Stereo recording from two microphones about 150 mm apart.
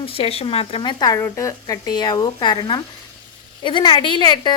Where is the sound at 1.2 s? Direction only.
20° left (ahead or behind).